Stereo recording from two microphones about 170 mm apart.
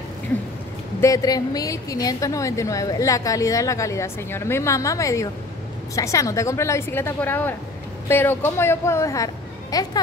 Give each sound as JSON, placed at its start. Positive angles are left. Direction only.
{"t": 1.0, "sound": "a woman's voice", "side_deg": 20}